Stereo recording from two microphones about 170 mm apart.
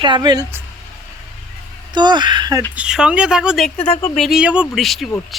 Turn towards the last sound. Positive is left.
turn(degrees=0)  # may be behind; listen again after turning